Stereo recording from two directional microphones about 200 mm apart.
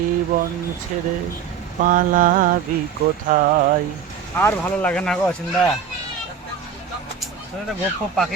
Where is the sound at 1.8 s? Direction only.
40° right (ahead or behind).